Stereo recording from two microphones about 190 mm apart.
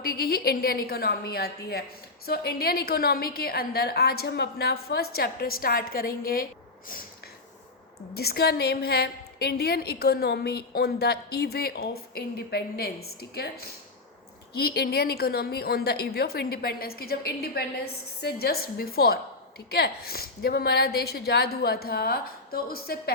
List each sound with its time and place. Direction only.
0.0 s a woman's voice: 55° left (ahead or behind)
8.1 s a woman's voice: 55° left (ahead or behind)